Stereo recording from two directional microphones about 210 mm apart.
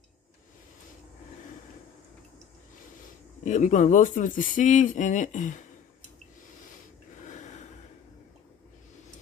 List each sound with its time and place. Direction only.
3.4 s speech: 35° left (ahead or behind)
7.2 s snort: 35° left (ahead or behind)